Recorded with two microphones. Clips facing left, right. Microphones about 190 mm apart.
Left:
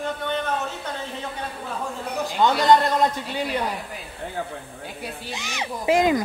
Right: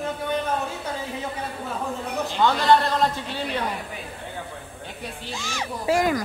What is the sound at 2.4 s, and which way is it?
Speech, 15° left (ahead or behind).